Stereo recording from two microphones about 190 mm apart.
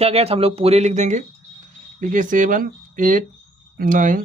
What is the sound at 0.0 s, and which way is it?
Speech, 30° right (ahead or behind).